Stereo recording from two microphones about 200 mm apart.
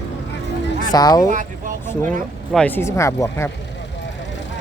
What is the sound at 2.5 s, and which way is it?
Speech, 5° left (ahead or behind).